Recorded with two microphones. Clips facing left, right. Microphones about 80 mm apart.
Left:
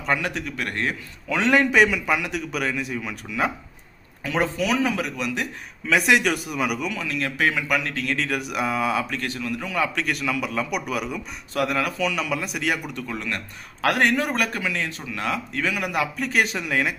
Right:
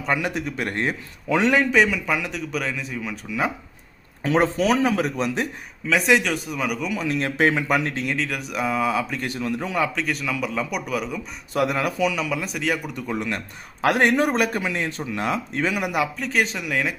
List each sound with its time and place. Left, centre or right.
0.0 s speech: centre
0.3 s a man's voice: right
1.4 s a man's voice: centre
4.2 s speech: right
5.9 s a man's voice: centre
6.9 s a man's voice: right
8.1 s a man's voice: centre
9.2 s a man's voice: right
9.8 s a man's voice: centre
11.5 s a man's voice: centre
12.0 s a man's voice: centre
13.1 s a man's voice: centre
15.8 s a man's voice: centre
16.2 s a man's voice: centre